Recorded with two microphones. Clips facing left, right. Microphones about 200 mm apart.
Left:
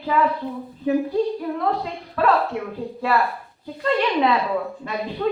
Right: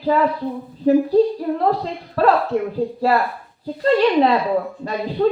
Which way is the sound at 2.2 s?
35° right (ahead or behind).